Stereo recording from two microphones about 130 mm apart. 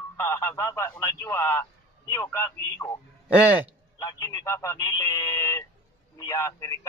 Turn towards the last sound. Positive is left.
turn(degrees=25)  # may be behind; listen again after turning